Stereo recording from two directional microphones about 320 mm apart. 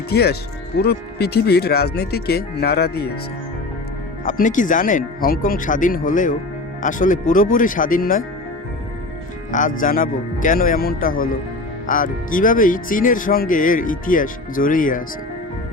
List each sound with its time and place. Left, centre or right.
0.1 s speech: left
4.2 s speech: left
9.5 s speech: left